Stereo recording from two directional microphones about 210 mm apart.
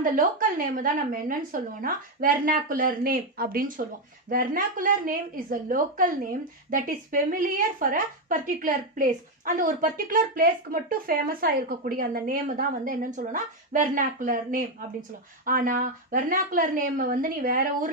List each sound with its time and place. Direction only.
0.0 s a woman's voice: 40° right (ahead or behind)